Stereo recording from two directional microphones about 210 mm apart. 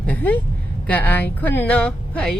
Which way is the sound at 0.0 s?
5° left (ahead or behind).